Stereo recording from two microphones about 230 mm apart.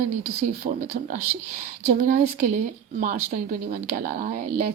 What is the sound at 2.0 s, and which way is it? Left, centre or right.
Speech, right.